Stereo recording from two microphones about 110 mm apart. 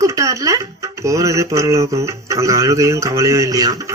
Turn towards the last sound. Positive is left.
turn(degrees=-35)  # may be behind; listen again after turning